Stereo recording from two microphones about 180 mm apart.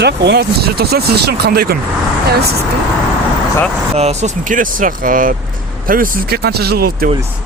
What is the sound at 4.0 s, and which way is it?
Speech, 40° right (ahead or behind).